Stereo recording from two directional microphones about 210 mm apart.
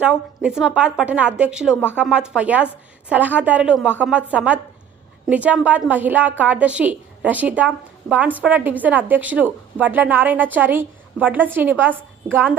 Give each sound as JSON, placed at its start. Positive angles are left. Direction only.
{"t": 0.0, "sound": "a woman's voice", "side_deg": -5}